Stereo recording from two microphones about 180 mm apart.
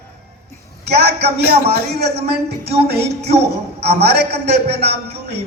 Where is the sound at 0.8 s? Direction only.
65° right (ahead or behind).